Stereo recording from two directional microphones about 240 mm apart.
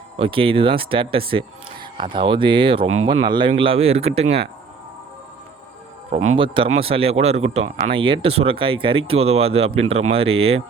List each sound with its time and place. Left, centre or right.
0.2 s speech: right
6.3 s speech: right